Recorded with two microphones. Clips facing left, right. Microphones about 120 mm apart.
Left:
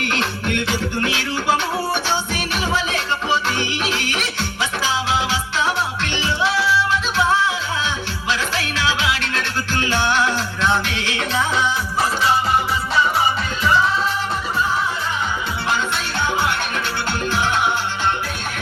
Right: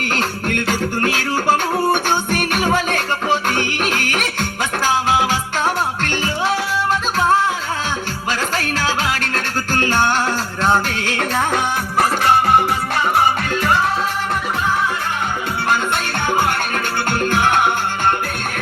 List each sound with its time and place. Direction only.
0.0 s music: 45° right (ahead or behind)
15.7 s music: 50° right (ahead or behind)